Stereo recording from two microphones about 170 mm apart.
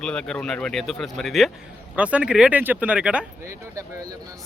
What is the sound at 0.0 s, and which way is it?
Speech, 5° left (ahead or behind).